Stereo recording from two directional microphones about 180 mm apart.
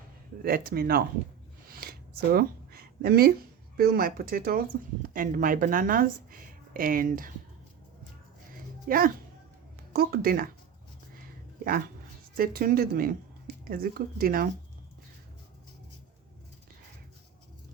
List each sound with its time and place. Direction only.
0.4 s speech: 55° right (ahead or behind)
1.8 s a sound: 55° right (ahead or behind)
3.8 s speech: 55° right (ahead or behind)
8.9 s speech: 50° right (ahead or behind)
12.4 s speech: 55° right (ahead or behind)